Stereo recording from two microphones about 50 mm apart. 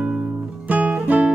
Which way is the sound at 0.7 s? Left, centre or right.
Right.